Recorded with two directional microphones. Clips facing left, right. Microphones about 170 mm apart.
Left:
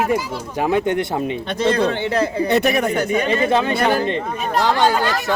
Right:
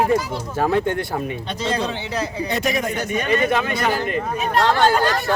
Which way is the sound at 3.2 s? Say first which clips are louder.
Left 2 dB; 30° left (ahead or behind).